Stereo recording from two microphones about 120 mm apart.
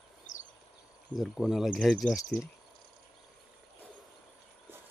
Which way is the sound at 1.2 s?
Centre (ahead or behind).